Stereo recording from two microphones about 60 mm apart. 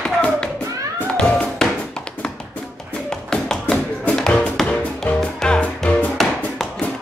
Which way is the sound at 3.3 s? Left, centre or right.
Centre.